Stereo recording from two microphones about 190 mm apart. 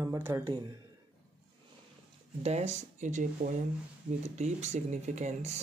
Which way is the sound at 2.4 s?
35° right (ahead or behind).